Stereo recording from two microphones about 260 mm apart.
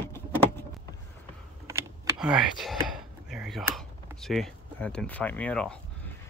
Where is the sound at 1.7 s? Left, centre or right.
Centre.